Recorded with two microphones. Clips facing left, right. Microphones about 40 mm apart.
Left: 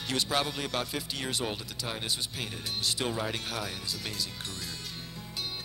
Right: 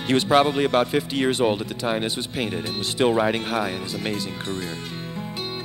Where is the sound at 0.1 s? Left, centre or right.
Right.